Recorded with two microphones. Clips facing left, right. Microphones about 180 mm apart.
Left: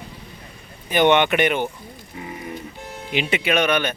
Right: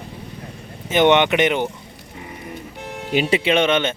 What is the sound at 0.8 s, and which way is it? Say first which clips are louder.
Speech: right 2 dB; 20° right (ahead or behind).